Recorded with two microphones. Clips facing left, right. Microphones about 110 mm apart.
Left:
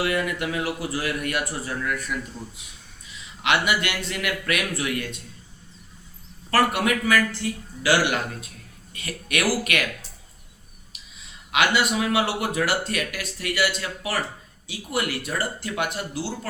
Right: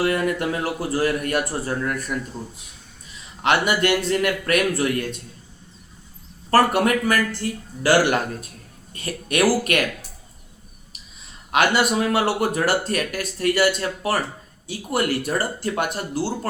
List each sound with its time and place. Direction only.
0.0 s speech: 40° right (ahead or behind)
3.4 s speech: 40° right (ahead or behind)
6.5 s a man's voice: 45° right (ahead or behind)
11.5 s a man's voice: 45° right (ahead or behind)